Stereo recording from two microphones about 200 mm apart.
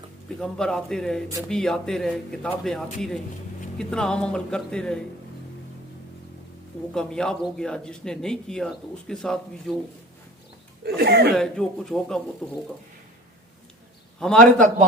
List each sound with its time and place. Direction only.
0.3 s a man's voice: 5° left (ahead or behind)
6.9 s a man's voice: 5° left (ahead or behind)
10.8 s speech: 50° right (ahead or behind)
11.3 s a man's voice: 5° left (ahead or behind)
14.2 s a man's voice: 5° left (ahead or behind)
14.4 s a man's voice: 40° right (ahead or behind)